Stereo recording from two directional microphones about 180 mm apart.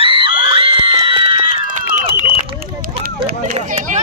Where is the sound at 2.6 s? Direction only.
55° right (ahead or behind).